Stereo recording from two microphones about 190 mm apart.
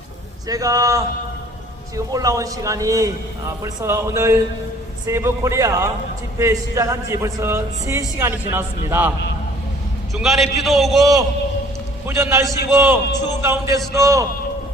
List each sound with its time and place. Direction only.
0.4 s speech: 20° right (ahead or behind)
2.1 s speech: 15° right (ahead or behind)
10.2 s a man's voice: centre (ahead or behind)
11.0 s a man's voice: 20° right (ahead or behind)